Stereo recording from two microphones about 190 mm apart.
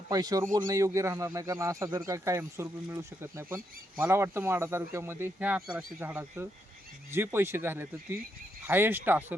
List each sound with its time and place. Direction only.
0.1 s speech: 20° right (ahead or behind)